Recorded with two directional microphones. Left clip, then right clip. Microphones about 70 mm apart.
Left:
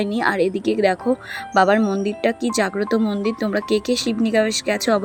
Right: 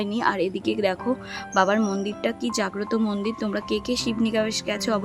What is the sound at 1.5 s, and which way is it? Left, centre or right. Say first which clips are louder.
Speech: left 5 dB; left.